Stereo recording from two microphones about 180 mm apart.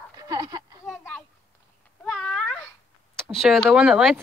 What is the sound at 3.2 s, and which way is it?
Speech, centre (ahead or behind).